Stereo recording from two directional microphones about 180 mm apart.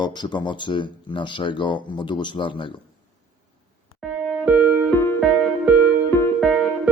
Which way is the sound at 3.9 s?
5° right (ahead or behind).